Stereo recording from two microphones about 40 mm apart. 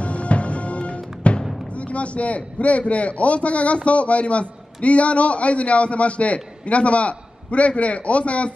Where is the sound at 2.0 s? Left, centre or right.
Left.